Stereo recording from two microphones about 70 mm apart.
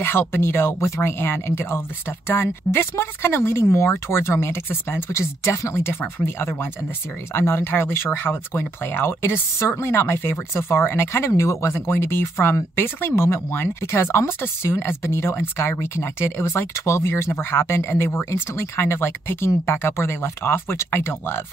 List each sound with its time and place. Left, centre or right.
0.0 s speech: left
1.2 s speech: left